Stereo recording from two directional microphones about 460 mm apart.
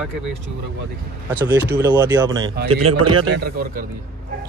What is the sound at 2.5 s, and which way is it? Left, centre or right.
Speech, right.